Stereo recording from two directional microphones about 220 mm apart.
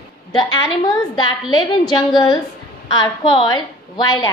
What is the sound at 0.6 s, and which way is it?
A woman's voice, 20° left (ahead or behind).